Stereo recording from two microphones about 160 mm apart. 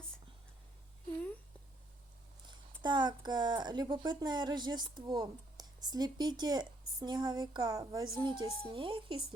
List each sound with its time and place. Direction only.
2.8 s a woman's voice: 30° right (ahead or behind)